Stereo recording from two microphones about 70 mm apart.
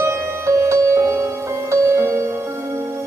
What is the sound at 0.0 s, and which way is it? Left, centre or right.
Music, right.